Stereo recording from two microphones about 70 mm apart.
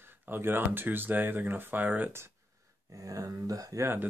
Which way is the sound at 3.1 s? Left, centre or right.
Right.